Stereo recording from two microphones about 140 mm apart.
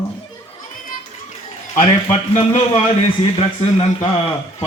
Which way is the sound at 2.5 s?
40° left (ahead or behind).